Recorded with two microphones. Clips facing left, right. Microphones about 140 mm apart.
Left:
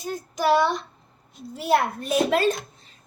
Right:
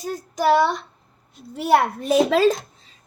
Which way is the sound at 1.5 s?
75° right (ahead or behind).